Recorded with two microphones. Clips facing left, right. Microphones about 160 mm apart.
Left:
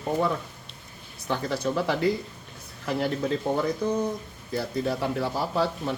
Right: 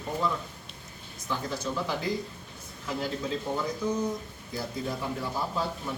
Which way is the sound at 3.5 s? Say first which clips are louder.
Left 6 dB; 55° left (ahead or behind).